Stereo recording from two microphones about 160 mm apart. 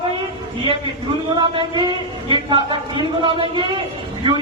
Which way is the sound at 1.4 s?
30° right (ahead or behind).